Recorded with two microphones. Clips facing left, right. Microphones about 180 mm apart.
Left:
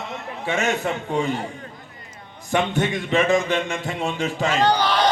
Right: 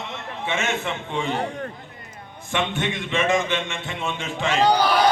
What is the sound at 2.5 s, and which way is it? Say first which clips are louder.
Speech: left 4 dB; 40° left (ahead or behind).